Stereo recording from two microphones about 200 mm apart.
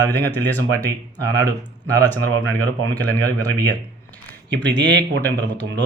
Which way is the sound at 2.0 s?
10° left (ahead or behind).